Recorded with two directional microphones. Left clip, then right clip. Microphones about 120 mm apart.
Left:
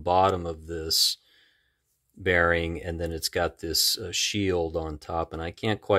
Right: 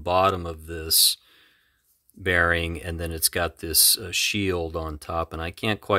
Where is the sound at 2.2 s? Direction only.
25° right (ahead or behind).